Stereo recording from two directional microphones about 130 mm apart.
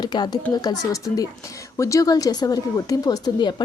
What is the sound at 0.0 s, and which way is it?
A woman's voice, 30° left (ahead or behind).